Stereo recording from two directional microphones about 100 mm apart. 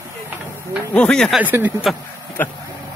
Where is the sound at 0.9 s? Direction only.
10° left (ahead or behind).